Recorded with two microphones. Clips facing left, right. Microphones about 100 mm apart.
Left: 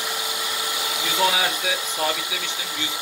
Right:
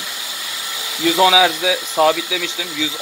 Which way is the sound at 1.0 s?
90° right.